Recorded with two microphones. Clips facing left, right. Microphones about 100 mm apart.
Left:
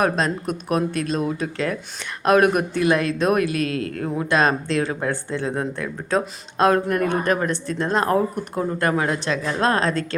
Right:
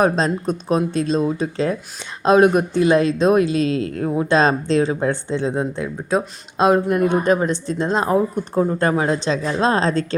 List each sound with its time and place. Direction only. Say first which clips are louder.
0.0 s speech: right 3 dB; 25° right (ahead or behind)